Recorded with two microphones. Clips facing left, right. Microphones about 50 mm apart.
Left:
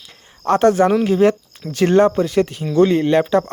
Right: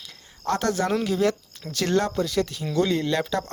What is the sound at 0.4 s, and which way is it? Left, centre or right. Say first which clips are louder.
Speech: left 10 dB; left.